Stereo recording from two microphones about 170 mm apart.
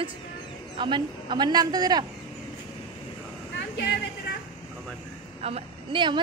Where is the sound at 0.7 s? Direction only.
25° right (ahead or behind).